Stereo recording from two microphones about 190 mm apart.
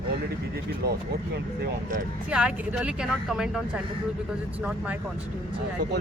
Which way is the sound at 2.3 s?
5° right (ahead or behind).